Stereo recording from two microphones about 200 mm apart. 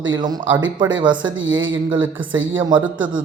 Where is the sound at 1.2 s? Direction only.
75° right (ahead or behind).